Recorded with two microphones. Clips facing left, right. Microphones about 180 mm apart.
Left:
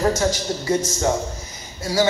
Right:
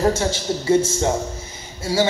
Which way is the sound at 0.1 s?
25° right (ahead or behind).